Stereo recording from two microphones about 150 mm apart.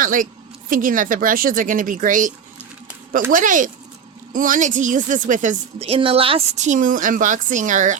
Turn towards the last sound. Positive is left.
turn(degrees=-55)  # may be behind; listen again after turning